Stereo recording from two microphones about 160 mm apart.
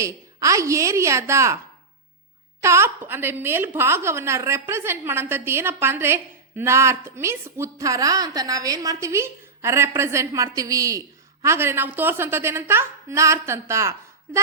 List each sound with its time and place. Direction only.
0.0 s a woman's voice: 20° right (ahead or behind)
2.6 s a woman's voice: 15° right (ahead or behind)